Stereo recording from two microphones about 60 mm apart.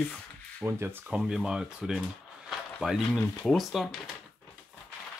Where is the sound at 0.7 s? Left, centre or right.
Right.